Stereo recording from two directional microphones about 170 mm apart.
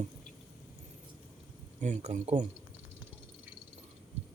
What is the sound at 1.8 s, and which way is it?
Speech, 45° right (ahead or behind).